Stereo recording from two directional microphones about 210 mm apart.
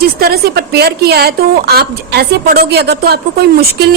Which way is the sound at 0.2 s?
45° right (ahead or behind).